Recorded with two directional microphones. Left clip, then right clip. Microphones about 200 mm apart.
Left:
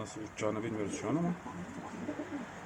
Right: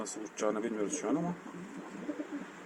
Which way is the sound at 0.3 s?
15° right (ahead or behind).